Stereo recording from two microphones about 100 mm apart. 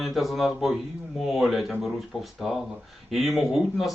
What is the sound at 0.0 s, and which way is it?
Speech, centre (ahead or behind).